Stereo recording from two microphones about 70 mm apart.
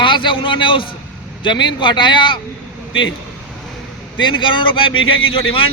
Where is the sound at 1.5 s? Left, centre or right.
Left.